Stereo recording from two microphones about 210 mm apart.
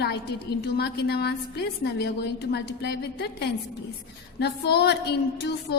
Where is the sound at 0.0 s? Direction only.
55° left (ahead or behind).